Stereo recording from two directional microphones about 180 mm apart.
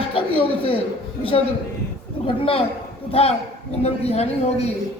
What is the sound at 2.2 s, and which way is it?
A man's voice, 30° left (ahead or behind).